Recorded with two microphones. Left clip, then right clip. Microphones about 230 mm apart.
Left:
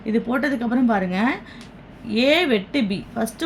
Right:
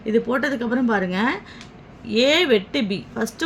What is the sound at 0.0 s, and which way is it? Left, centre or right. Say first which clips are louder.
A woman's voice: right 2 dB; centre.